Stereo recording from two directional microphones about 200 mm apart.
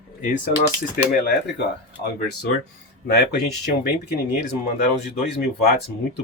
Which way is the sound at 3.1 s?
50° left (ahead or behind).